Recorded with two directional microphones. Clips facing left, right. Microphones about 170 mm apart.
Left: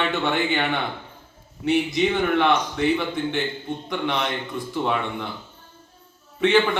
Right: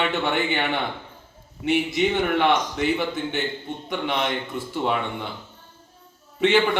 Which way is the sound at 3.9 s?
5° right (ahead or behind).